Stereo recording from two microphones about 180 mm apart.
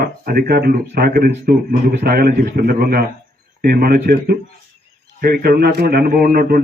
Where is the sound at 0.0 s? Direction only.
55° right (ahead or behind).